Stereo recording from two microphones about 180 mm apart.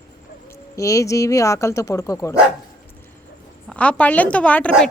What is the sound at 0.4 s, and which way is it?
Speech, 15° left (ahead or behind).